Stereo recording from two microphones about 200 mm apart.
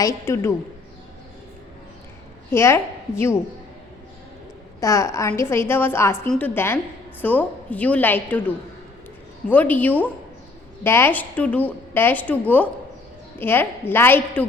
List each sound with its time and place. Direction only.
0.0 s a woman's voice: 15° left (ahead or behind)
2.5 s a woman's voice: 15° left (ahead or behind)
4.8 s a woman's voice: 15° left (ahead or behind)